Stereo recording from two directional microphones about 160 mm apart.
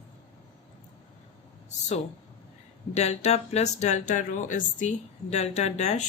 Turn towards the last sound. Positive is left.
turn(degrees=45)  # may be behind; listen again after turning